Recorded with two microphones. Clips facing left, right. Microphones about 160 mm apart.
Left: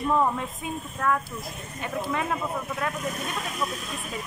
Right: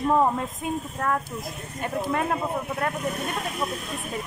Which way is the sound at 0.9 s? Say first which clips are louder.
Even; 40° right (ahead or behind).